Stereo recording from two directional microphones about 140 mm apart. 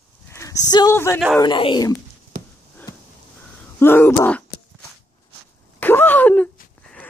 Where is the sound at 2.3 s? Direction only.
80° right.